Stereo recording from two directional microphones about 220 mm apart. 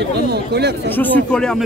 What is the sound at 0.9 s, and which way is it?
Speech, 5° left (ahead or behind).